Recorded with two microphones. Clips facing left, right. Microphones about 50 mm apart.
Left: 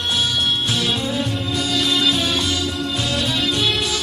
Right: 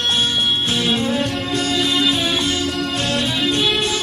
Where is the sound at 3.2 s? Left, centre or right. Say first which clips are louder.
Right 1 dB; centre.